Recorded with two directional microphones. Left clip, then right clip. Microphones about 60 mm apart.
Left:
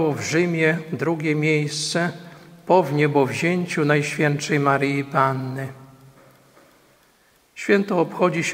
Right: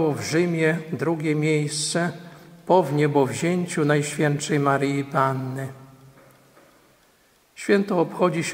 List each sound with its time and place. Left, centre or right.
0.0 s a man's voice: centre
2.2 s a sound: centre
2.7 s speech: centre
7.5 s speech: centre